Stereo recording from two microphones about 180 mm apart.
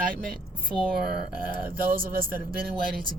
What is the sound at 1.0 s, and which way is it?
A woman's voice, 50° right (ahead or behind).